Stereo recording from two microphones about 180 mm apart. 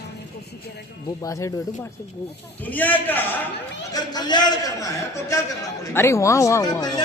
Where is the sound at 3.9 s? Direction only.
20° left (ahead or behind).